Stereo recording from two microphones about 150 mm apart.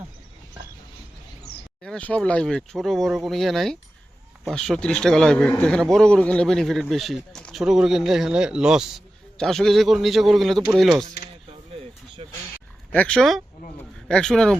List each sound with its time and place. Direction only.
1.8 s a man's voice: 10° left (ahead or behind)
12.2 s speech: 40° right (ahead or behind)
12.9 s a man's voice: 10° left (ahead or behind)